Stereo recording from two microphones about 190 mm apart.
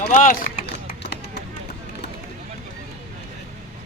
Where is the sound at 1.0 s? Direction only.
60° left (ahead or behind).